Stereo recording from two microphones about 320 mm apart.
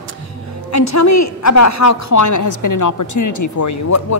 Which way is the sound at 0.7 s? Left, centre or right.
Left.